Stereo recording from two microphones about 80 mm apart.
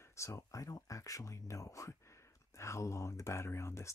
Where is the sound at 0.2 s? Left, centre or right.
Left.